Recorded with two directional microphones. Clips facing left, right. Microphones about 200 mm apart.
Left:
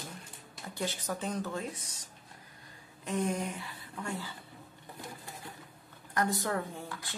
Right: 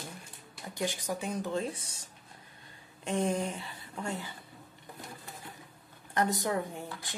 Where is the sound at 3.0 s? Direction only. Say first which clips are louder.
Right 2 dB; 30° right (ahead or behind).